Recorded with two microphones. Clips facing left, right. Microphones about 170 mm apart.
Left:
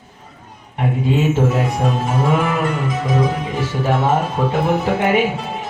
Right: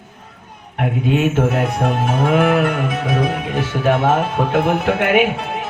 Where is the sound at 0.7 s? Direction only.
65° right (ahead or behind).